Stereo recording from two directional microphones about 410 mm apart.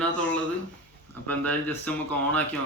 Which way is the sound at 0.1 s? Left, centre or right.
Left.